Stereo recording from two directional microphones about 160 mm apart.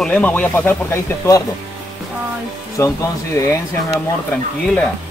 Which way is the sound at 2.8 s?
15° left (ahead or behind).